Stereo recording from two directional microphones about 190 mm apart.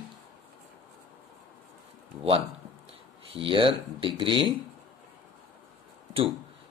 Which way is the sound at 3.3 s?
25° right (ahead or behind).